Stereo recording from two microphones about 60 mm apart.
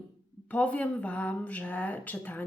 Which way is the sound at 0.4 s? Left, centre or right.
Left.